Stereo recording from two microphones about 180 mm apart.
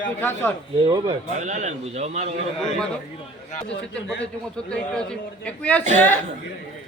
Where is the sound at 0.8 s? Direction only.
20° right (ahead or behind).